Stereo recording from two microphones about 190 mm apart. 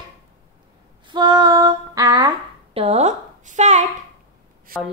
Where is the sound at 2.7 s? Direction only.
35° right (ahead or behind).